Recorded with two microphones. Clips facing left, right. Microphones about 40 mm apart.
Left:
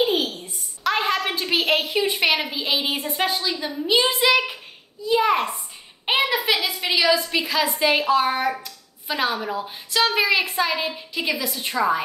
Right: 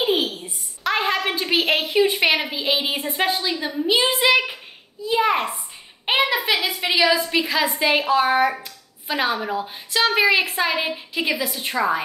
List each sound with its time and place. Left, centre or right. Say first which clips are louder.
0.0 s a sound: even; centre
2.5 s a woman's voice: right 1 dB; centre
6.9 s a woman's voice: right 1 dB; centre